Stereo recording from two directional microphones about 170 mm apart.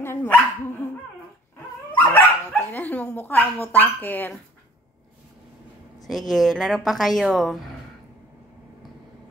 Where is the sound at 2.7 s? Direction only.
10° left (ahead or behind).